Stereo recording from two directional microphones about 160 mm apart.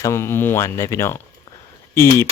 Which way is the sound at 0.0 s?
15° left (ahead or behind).